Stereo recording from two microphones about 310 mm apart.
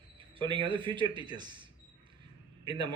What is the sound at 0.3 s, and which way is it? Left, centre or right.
Speech, centre.